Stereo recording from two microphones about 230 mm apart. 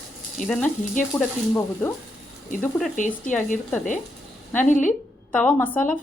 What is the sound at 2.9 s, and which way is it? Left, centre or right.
Frying, left.